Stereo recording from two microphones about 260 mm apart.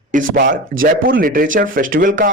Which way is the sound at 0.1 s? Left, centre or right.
Right.